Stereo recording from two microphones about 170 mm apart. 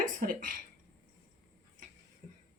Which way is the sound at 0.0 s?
55° right (ahead or behind).